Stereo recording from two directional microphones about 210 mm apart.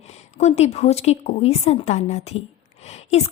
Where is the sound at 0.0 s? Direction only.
30° left (ahead or behind).